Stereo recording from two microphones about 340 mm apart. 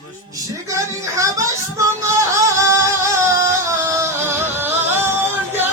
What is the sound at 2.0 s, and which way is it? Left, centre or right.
Music, centre.